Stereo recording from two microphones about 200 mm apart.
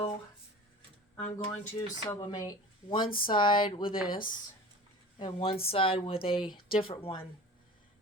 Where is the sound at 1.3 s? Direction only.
15° left (ahead or behind).